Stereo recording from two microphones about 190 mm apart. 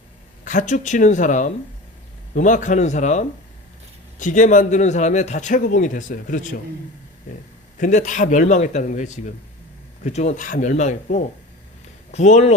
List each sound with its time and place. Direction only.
0.4 s speech: 40° left (ahead or behind)
7.8 s speech: 40° left (ahead or behind)